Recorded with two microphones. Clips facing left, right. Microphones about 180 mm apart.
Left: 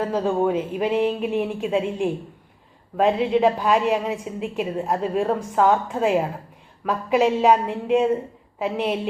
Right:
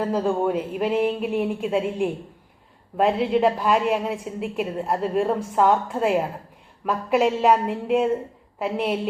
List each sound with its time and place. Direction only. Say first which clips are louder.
0.1 s a woman's voice: left 1 dB; centre (ahead or behind)